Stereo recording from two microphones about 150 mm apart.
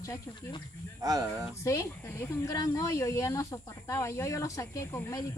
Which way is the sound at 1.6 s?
20° left (ahead or behind).